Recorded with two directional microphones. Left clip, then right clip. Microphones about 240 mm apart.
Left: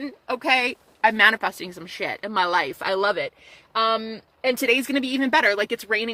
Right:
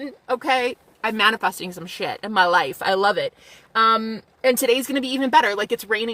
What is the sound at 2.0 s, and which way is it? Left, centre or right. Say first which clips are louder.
Speech: right 1 dB; left.